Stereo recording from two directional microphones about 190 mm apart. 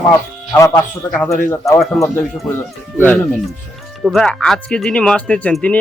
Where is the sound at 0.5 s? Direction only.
15° left (ahead or behind).